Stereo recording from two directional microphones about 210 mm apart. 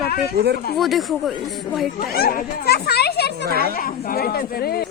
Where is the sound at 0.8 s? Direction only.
Centre (ahead or behind).